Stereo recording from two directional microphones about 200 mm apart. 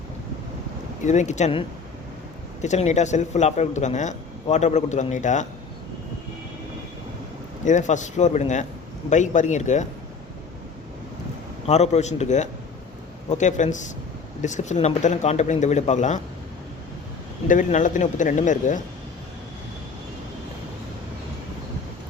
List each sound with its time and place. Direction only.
1.0 s speech: 35° left (ahead or behind)
7.6 s speech: 40° left (ahead or behind)
11.6 s speech: 35° left (ahead or behind)
17.5 s speech: 40° left (ahead or behind)